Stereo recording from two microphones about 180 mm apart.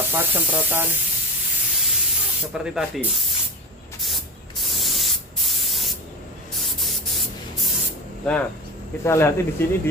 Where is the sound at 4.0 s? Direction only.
Centre (ahead or behind).